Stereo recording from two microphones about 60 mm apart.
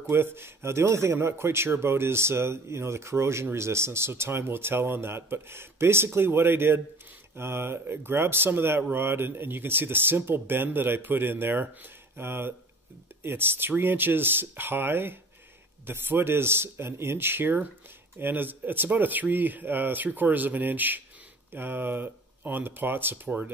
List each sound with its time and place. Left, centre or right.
0.1 s a man's voice: right